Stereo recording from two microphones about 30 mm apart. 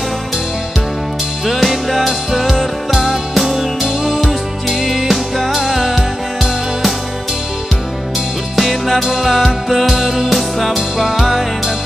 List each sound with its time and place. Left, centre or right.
1.4 s music: centre
3.8 s music: centre
4.2 s music: centre
4.7 s music: centre
8.5 s music: centre
9.0 s music: centre